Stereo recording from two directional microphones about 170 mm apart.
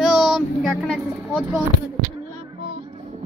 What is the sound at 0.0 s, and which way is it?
Child singing, 5° right (ahead or behind).